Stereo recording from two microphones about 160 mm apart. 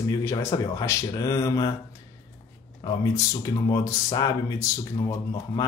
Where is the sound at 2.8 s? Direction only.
20° left (ahead or behind).